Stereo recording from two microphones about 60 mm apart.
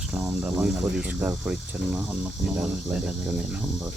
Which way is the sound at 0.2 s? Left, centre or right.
Centre.